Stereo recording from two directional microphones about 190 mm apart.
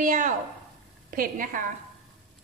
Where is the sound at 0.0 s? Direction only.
45° right (ahead or behind).